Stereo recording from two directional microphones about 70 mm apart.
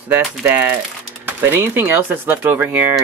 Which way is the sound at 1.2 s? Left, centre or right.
Right.